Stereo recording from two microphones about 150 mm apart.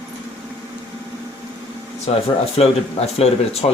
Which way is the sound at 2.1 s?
40° left (ahead or behind).